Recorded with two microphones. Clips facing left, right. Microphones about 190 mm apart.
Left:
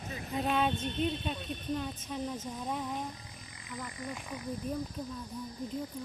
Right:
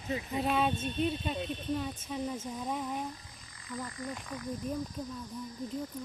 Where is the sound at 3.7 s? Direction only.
20° left (ahead or behind).